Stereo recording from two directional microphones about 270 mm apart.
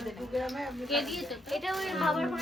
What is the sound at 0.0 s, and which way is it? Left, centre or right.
A woman's voice, centre.